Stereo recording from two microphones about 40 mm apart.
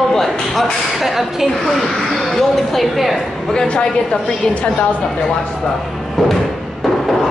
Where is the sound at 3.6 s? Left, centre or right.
Left.